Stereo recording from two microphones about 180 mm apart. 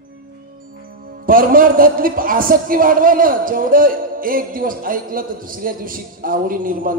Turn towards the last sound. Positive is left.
turn(degrees=-50)  # may be behind; listen again after turning